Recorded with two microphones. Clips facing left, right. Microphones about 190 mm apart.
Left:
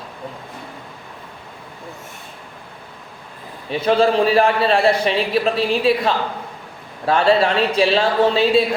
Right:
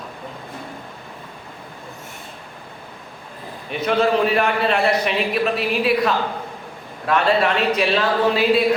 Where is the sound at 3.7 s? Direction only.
30° left (ahead or behind).